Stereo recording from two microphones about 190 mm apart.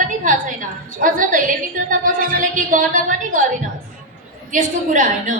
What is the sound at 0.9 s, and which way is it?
A woman's voice, 45° right (ahead or behind).